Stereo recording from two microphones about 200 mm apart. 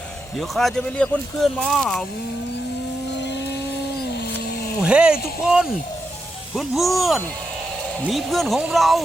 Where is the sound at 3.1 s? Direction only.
60° left (ahead or behind).